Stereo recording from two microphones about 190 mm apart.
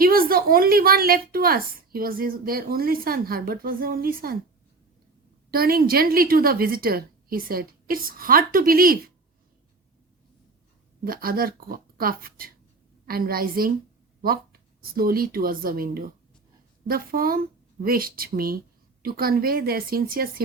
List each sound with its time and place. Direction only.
0.0 s a woman's voice: 50° right (ahead or behind)
5.5 s a woman's voice: 50° right (ahead or behind)
11.0 s a woman's voice: 50° right (ahead or behind)